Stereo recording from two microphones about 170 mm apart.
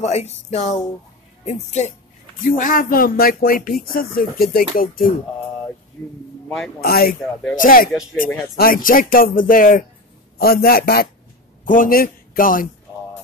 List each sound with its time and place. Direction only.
0.0 s speech: 40° left (ahead or behind)
2.4 s speech: 55° left (ahead or behind)
6.8 s speech: 60° left (ahead or behind)
7.9 s speech: centre (ahead or behind)
8.5 s a man's voice: 60° left (ahead or behind)